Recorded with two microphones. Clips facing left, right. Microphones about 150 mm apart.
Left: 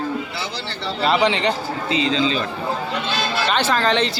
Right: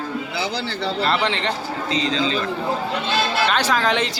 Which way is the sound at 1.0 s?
5° left (ahead or behind).